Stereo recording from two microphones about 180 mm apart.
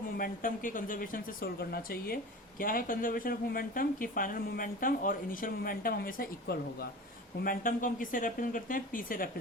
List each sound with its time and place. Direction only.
0.2 s speech: 50° left (ahead or behind)